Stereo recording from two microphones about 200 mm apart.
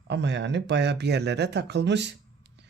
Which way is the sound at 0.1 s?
60° right (ahead or behind).